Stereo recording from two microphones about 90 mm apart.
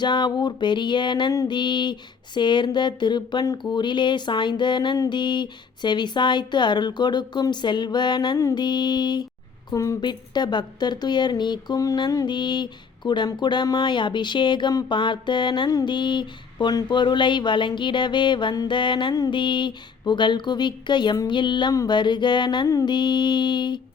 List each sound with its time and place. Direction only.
0.0 s speech: 55° left (ahead or behind)
9.7 s a woman's voice: 35° left (ahead or behind)
10.0 s speech: 55° left (ahead or behind)
22.9 s speech: 55° left (ahead or behind)